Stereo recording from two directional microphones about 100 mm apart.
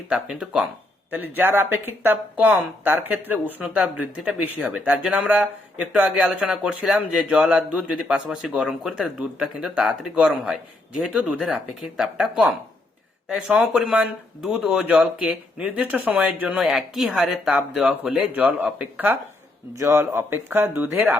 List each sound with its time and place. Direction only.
0.1 s speech: 5° right (ahead or behind)
1.1 s speech: 20° right (ahead or behind)
5.0 s speech: 5° right (ahead or behind)
19.7 s speech: 30° right (ahead or behind)